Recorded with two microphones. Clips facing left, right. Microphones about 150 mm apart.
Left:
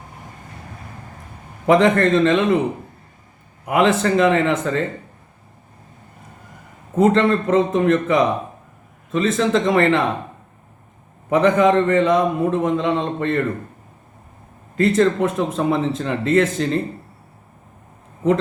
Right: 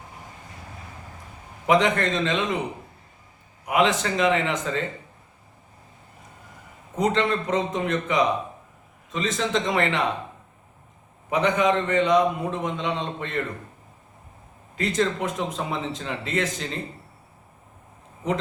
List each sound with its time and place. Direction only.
1.7 s speech: 50° left (ahead or behind)
3.8 s speech: 50° left (ahead or behind)
6.9 s speech: 50° left (ahead or behind)
11.3 s speech: 50° left (ahead or behind)
14.8 s speech: 50° left (ahead or behind)